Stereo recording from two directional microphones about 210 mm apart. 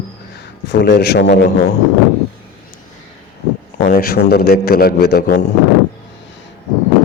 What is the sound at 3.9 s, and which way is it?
A man's voice, 45° left (ahead or behind).